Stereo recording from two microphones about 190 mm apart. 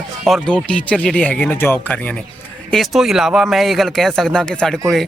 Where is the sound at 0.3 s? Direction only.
Centre (ahead or behind).